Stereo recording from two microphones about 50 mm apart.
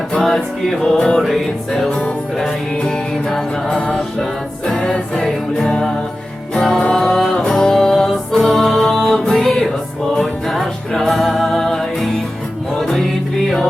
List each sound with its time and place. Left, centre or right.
0.1 s music: centre
0.8 s music: centre
1.2 s music: centre
1.9 s music: centre
3.2 s music: centre